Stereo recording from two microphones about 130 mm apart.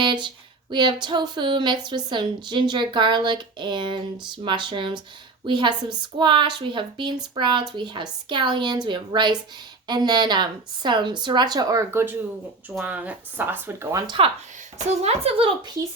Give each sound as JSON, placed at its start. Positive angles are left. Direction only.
{"t": 0.0, "sound": "a sound", "side_deg": -35}
{"t": 0.7, "sound": "speech", "side_deg": -35}
{"t": 14.2, "sound": "speech", "side_deg": -45}
{"t": 14.8, "sound": "speech", "side_deg": -55}